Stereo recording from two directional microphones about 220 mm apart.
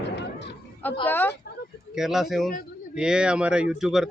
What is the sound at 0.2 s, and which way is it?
Chatter, 50° left (ahead or behind).